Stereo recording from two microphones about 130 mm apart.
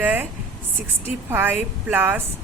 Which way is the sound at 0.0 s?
15° right (ahead or behind).